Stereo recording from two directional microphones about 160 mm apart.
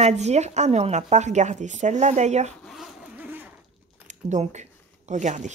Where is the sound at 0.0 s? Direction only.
45° right (ahead or behind).